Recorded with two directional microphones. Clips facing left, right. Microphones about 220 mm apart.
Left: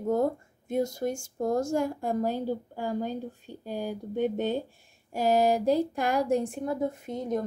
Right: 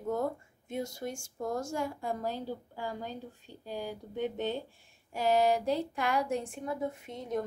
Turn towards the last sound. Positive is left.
turn(degrees=40)  # may be behind; listen again after turning